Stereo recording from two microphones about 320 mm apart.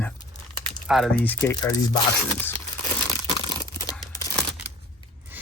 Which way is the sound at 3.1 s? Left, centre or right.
Centre.